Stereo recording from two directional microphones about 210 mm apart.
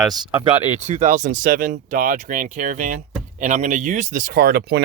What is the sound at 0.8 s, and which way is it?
Speech, 35° right (ahead or behind).